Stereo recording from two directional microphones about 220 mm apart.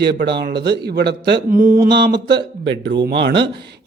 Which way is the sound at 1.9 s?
50° right (ahead or behind).